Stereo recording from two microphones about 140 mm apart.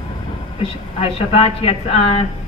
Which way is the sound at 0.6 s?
45° left (ahead or behind).